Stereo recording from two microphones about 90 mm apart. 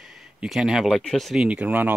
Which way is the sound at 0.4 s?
5° right (ahead or behind).